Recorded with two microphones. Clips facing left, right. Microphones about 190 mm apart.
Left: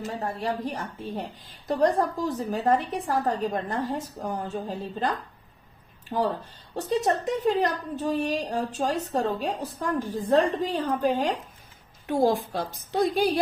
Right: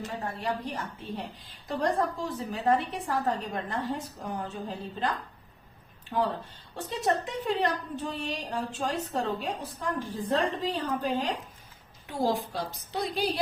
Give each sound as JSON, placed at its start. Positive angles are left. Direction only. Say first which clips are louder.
{"t": 0.4, "sound": "a woman's voice", "louder": "left 2 dB", "side_deg": 40}
{"t": 6.1, "sound": "a woman's voice", "louder": "left 3 dB", "side_deg": 35}